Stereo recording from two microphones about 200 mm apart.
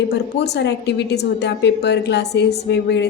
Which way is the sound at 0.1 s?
55° left (ahead or behind).